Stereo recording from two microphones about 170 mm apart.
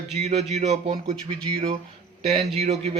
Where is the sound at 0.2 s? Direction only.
40° right (ahead or behind).